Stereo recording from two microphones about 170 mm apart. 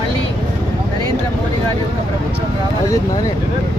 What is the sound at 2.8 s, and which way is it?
Speech, 20° left (ahead or behind).